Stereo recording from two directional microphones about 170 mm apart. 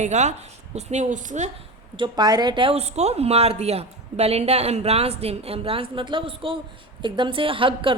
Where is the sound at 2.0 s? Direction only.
25° right (ahead or behind).